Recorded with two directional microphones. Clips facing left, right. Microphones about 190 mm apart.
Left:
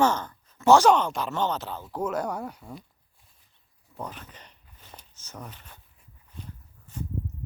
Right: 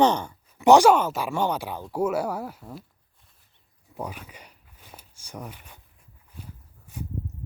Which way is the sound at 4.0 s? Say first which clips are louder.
Right 3 dB; 10° right (ahead or behind).